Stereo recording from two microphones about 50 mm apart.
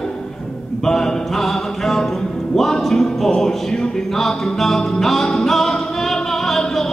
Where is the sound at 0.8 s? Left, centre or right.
Centre.